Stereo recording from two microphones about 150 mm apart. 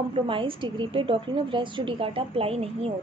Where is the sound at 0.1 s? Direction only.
35° right (ahead or behind).